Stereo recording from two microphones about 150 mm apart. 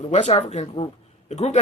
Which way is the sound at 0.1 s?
50° left (ahead or behind).